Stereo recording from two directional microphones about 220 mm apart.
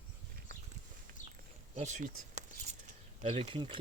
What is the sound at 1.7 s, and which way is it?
Speech, 30° right (ahead or behind).